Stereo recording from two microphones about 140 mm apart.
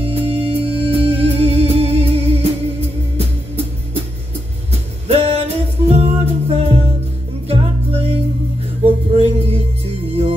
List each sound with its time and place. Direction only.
0.0 s music: 45° right (ahead or behind)
5.0 s music: 45° right (ahead or behind)